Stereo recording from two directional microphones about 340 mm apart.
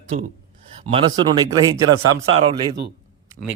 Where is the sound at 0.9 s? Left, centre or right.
Centre.